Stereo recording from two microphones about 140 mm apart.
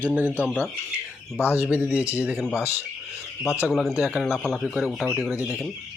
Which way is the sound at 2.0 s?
20° left (ahead or behind).